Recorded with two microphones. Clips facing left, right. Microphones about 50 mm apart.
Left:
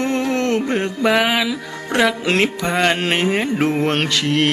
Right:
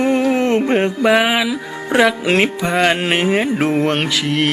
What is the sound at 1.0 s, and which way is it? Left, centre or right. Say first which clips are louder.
Music: left 1 dB; centre.